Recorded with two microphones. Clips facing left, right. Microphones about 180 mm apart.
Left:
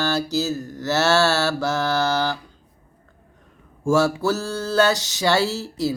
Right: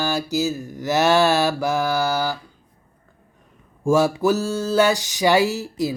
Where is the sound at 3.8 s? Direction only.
15° right (ahead or behind).